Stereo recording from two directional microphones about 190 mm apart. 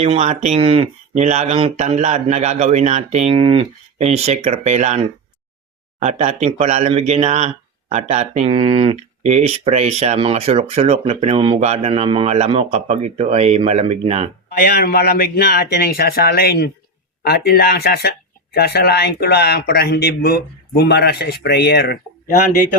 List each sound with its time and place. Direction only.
0.0 s speech: 35° right (ahead or behind)
6.0 s speech: 35° right (ahead or behind)
14.6 s speech: 55° left (ahead or behind)